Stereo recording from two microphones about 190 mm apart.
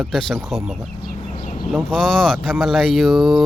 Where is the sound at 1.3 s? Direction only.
30° left (ahead or behind).